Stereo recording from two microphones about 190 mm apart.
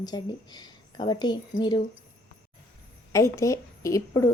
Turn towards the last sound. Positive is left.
turn(degrees=15)  # may be behind; listen again after turning